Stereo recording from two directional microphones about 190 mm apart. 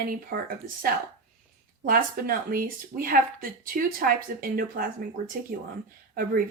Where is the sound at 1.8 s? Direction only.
50° right (ahead or behind).